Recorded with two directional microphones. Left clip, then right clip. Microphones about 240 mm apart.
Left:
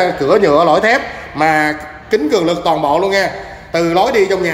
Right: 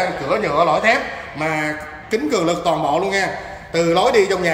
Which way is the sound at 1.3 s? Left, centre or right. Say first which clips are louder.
Left 9 dB; centre.